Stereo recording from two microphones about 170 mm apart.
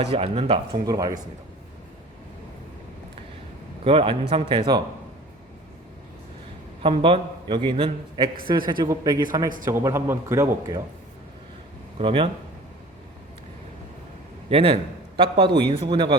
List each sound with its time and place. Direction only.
0.0 s speech: 35° right (ahead or behind)
0.9 s a man's voice: 20° right (ahead or behind)
3.8 s speech: 30° right (ahead or behind)
6.8 s a man's voice: 30° right (ahead or behind)
11.9 s speech: 30° right (ahead or behind)
14.5 s a man's voice: 35° right (ahead or behind)